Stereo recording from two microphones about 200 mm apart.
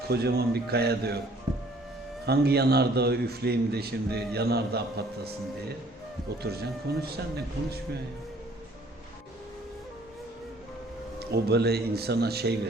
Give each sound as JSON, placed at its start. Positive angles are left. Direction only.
{"t": 0.1, "sound": "a man's voice", "side_deg": -50}
{"t": 2.2, "sound": "a man's voice", "side_deg": -55}
{"t": 11.2, "sound": "a man's voice", "side_deg": -55}